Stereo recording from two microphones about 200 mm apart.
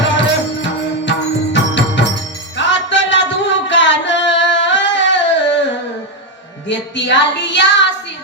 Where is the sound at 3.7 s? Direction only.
65° left (ahead or behind).